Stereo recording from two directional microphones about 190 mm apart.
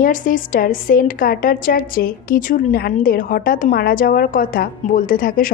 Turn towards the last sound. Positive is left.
turn(degrees=45)  # may be behind; listen again after turning